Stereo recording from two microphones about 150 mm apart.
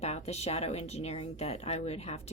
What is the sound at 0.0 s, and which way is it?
Speech, 45° left (ahead or behind).